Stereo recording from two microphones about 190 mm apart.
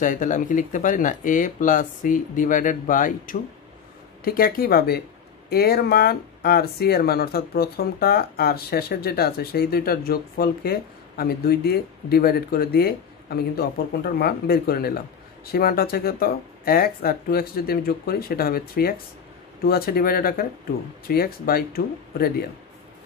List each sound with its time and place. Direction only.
0.0 s speech: 45° left (ahead or behind)